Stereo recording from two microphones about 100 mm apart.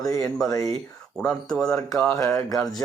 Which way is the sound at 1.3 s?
5° left (ahead or behind).